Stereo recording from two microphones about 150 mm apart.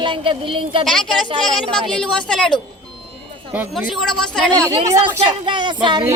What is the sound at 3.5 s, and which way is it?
Speech, 10° right (ahead or behind).